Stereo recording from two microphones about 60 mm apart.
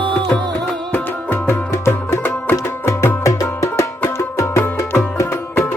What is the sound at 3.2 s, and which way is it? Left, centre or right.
Music, left.